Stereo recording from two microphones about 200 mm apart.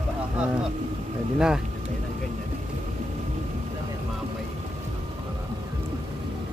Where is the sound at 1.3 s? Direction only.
5° right (ahead or behind).